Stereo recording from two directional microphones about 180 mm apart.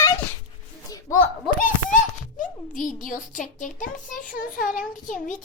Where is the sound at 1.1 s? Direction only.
15° left (ahead or behind).